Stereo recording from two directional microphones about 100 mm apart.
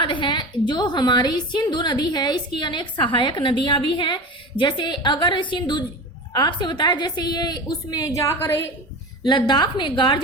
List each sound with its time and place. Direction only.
0.0 s a woman's voice: 55° left (ahead or behind); by 8.7 s 20° left (ahead or behind)
9.2 s a woman's voice: 50° left (ahead or behind)